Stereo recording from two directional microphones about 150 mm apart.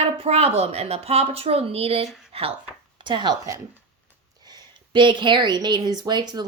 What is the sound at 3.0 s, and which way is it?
A woman's voice, 30° right (ahead or behind).